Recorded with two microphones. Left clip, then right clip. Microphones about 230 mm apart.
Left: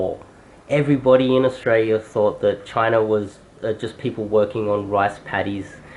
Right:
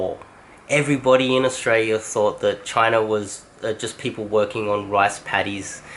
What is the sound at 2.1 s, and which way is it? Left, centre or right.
Speech, left.